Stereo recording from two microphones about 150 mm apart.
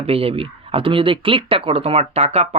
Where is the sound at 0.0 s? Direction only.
40° right (ahead or behind).